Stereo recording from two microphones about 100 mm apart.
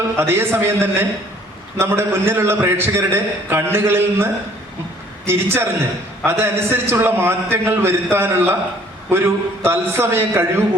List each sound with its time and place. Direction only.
0.2 s a man's voice: 25° right (ahead or behind)